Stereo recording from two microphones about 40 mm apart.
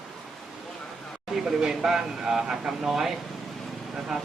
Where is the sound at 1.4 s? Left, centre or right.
Centre.